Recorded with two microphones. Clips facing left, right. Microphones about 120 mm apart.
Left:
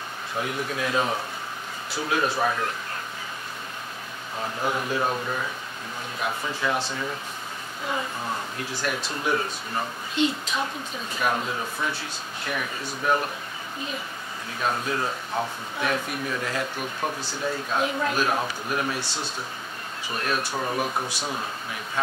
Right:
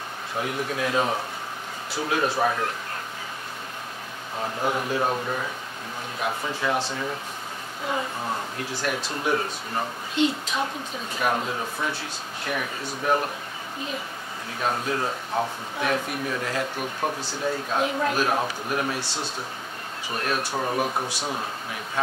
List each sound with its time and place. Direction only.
0.4 s speech: 40° right (ahead or behind)
4.4 s speech: 30° right (ahead or behind)
11.1 s speech: 35° right (ahead or behind)
14.6 s speech: 35° right (ahead or behind)
20.1 s speech: 40° right (ahead or behind); by 21.5 s 25° right (ahead or behind)